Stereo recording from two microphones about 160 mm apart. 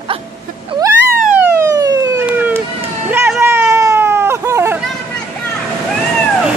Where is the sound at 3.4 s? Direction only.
15° right (ahead or behind).